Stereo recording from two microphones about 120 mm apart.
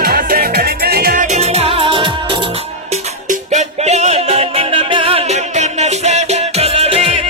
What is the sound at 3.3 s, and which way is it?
Music, 80° right.